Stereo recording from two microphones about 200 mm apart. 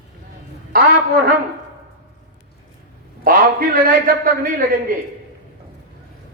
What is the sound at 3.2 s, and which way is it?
Speech, 45° right (ahead or behind).